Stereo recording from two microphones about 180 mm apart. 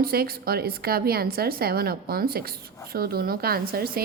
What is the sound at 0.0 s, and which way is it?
A woman's voice, 60° right (ahead or behind).